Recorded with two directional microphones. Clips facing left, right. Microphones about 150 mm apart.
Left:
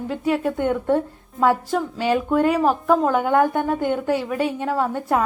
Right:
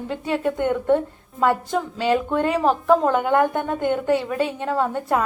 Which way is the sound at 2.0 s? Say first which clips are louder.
Left 2 dB; 10° left (ahead or behind).